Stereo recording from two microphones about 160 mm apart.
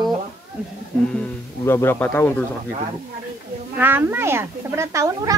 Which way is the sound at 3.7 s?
10° right (ahead or behind).